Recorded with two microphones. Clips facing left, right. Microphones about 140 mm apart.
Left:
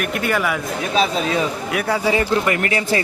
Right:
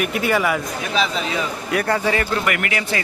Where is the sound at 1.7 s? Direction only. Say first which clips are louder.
Right 1 dB; 5° left (ahead or behind); by 3.0 s 30° left (ahead or behind).